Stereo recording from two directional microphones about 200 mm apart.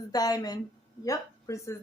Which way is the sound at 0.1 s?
20° left (ahead or behind).